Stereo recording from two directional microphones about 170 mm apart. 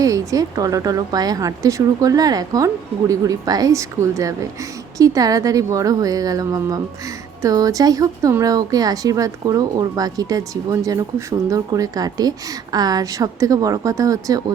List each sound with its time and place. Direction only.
0.0 s speech: 20° right (ahead or behind)